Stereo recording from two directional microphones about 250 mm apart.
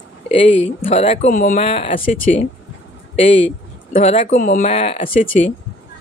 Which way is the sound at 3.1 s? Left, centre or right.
Left.